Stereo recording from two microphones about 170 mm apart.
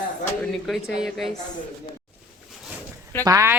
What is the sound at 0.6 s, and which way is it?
Speech, centre (ahead or behind).